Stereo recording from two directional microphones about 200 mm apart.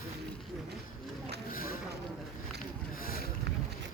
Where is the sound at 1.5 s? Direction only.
45° left (ahead or behind).